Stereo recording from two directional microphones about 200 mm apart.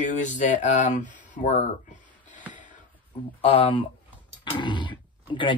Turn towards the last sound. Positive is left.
turn(degrees=25)  # may be behind; listen again after turning